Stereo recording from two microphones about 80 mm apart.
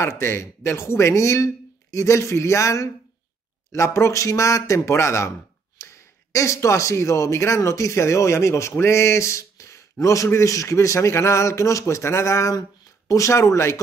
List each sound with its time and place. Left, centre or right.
0.0 s speech: left